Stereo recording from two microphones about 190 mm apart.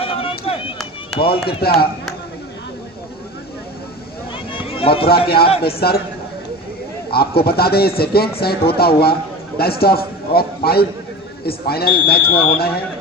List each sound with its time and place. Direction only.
0.0 s chop: 30° left (ahead or behind)
1.1 s speech: 30° left (ahead or behind)
1.6 s speech: 55° left (ahead or behind)
4.5 s a sound: 30° left (ahead or behind)
5.6 s speech: 55° left (ahead or behind)
7.1 s a man's voice: 55° left (ahead or behind)